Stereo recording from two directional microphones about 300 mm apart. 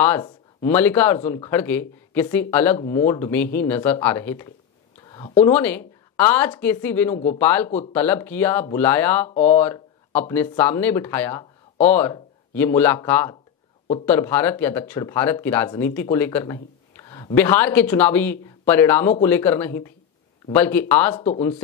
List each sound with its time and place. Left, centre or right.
0.0 s speech: centre
9.3 s speech: left
9.6 s speech: centre